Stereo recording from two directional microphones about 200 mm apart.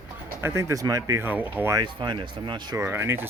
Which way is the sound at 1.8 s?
25° right (ahead or behind).